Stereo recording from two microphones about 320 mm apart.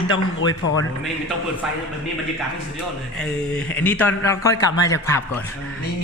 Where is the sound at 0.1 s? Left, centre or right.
Left.